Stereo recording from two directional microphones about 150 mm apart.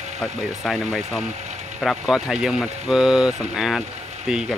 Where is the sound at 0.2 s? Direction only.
5° left (ahead or behind).